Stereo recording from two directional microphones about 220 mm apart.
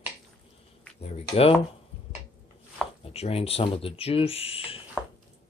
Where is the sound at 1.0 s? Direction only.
25° left (ahead or behind).